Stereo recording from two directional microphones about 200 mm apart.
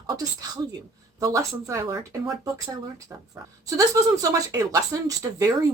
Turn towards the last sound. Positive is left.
turn(degrees=-15)  # may be behind; listen again after turning